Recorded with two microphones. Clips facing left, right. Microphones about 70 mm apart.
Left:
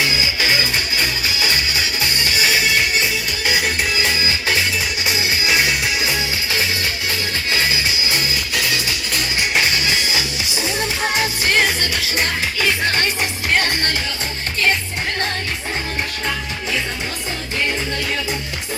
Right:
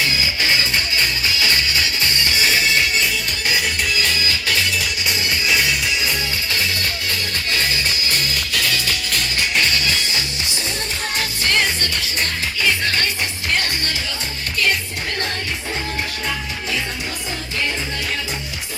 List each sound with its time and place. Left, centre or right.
0.0 s music: centre
5.0 s music: centre
9.6 s music: centre
12.8 s music: left